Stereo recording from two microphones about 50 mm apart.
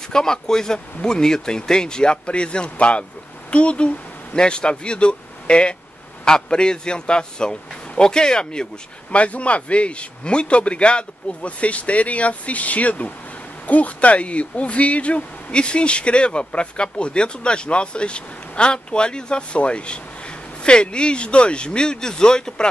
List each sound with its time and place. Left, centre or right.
0.1 s a man's voice: centre